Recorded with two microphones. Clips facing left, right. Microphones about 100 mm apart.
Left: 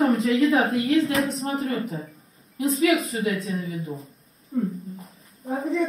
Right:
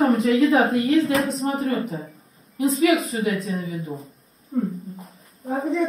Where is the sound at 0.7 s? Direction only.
30° right (ahead or behind).